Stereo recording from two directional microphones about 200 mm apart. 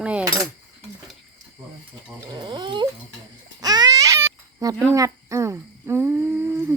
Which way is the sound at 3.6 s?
20° right (ahead or behind).